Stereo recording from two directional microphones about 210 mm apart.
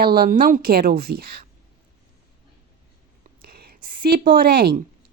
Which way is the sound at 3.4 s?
45° right (ahead or behind).